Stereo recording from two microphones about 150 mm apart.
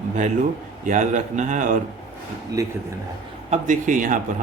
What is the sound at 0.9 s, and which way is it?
Speech, 55° right (ahead or behind).